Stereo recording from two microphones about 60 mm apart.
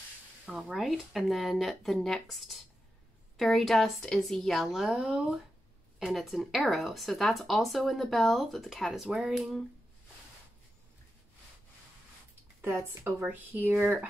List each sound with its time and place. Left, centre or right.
0.5 s a woman's voice: centre
4.6 s speech: centre
12.6 s speech: right